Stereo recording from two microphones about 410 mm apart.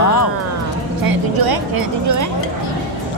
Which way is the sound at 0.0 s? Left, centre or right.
Left.